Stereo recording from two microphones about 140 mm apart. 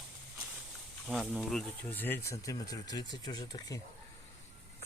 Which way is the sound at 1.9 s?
15° left (ahead or behind).